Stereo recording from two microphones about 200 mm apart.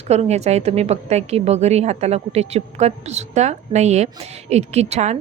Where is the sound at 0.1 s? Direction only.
35° right (ahead or behind).